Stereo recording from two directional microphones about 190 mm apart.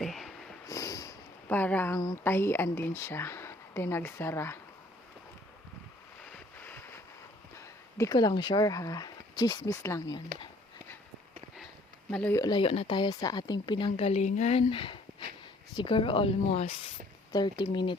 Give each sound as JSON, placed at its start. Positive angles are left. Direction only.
{"t": 0.0, "sound": "a sound", "side_deg": 0}
{"t": 0.7, "sound": "sniff", "side_deg": 20}
{"t": 2.0, "sound": "speech", "side_deg": 15}
{"t": 6.2, "sound": "a sound", "side_deg": 10}
{"t": 7.5, "sound": "speech", "side_deg": 15}
{"t": 12.1, "sound": "speech", "side_deg": 5}
{"t": 12.4, "sound": "speech", "side_deg": 25}